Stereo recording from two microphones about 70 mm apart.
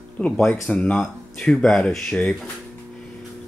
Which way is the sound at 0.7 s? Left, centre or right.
Centre.